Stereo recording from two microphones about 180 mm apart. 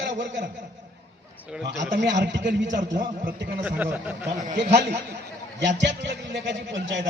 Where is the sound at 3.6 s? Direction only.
10° right (ahead or behind).